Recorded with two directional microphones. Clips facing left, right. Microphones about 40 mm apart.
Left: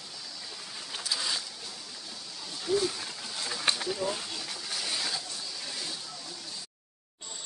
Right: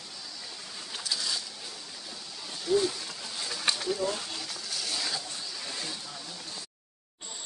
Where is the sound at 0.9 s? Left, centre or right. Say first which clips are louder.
Even; centre.